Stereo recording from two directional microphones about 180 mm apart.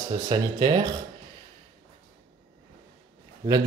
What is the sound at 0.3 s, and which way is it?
Speech, 25° right (ahead or behind).